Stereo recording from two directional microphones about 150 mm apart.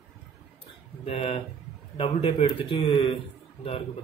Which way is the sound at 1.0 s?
40° left (ahead or behind).